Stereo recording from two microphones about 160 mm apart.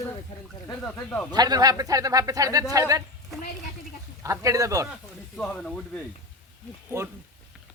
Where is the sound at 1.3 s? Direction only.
25° right (ahead or behind).